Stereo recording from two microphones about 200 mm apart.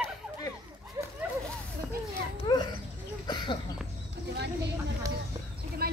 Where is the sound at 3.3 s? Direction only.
25° left (ahead or behind).